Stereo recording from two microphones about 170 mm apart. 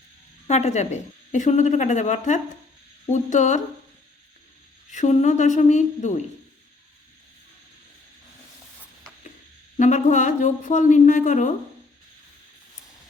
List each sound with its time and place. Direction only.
0.4 s a woman's voice: 40° left (ahead or behind)
4.9 s a woman's voice: 45° left (ahead or behind)
9.7 s a woman's voice: 45° left (ahead or behind)